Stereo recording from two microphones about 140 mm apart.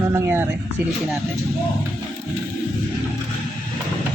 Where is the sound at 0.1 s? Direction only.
15° right (ahead or behind).